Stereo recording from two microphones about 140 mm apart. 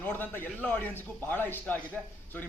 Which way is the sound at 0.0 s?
15° left (ahead or behind).